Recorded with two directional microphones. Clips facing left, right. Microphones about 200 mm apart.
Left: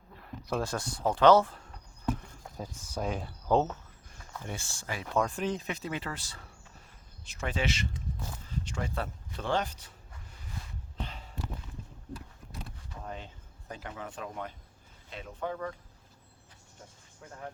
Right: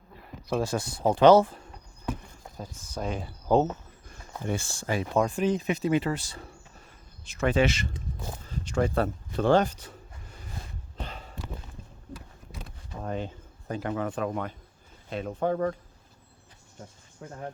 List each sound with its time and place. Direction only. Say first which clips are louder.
0.2 s speech: right 4 dB; 5° right (ahead or behind)
2.6 s speech: right 1 dB; 10° left (ahead or behind); by 3.8 s 10° right (ahead or behind)
4.4 s speech: right 10 dB; 60° right (ahead or behind)
4.7 s speech: right 9 dB; 30° right (ahead or behind)
5.0 s speech: right 4 dB; 10° right (ahead or behind)
7.3 s speech: right 9 dB; 65° right (ahead or behind); by 9.9 s 45° right (ahead or behind)
10.9 s a sound: right 2 dB; 50° right (ahead or behind)
13.0 s speech: right 9 dB; 55° right (ahead or behind)
15.1 s speech: right 9 dB; 45° right (ahead or behind)
17.2 s speech: right 7 dB; 35° right (ahead or behind)